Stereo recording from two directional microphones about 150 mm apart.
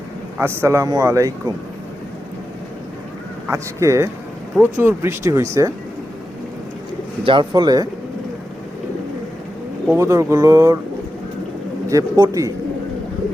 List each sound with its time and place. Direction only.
0.3 s a man's voice: 15° right (ahead or behind)
3.5 s a man's voice: 20° right (ahead or behind)
7.3 s a man's voice: 30° right (ahead or behind)
9.9 s a man's voice: 20° right (ahead or behind)
11.9 s a man's voice: 25° right (ahead or behind)